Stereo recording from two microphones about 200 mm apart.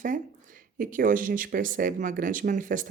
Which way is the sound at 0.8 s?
40° right (ahead or behind).